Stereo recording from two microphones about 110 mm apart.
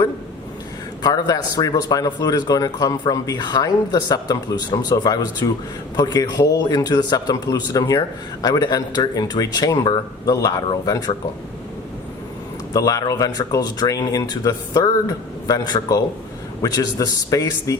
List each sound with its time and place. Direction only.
1.0 s speech: 35° left (ahead or behind)
12.7 s speech: 30° left (ahead or behind)